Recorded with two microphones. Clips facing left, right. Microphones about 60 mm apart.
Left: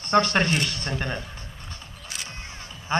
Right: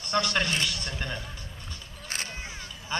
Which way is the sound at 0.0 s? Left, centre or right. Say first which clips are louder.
Left 6 dB; left.